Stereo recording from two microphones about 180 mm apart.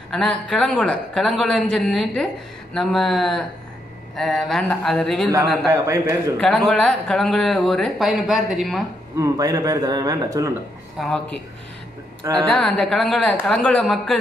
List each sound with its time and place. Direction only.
0.1 s speech: 5° left (ahead or behind)
5.7 s a man's voice: 15° right (ahead or behind)
6.3 s speech: centre (ahead or behind)
9.2 s a man's voice: 20° right (ahead or behind)
11.0 s speech: centre (ahead or behind)
12.4 s speech: 5° left (ahead or behind)